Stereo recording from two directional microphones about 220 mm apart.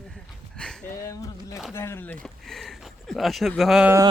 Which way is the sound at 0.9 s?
15° left (ahead or behind).